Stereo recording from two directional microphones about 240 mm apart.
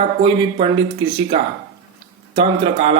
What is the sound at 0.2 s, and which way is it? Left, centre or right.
Speech, right.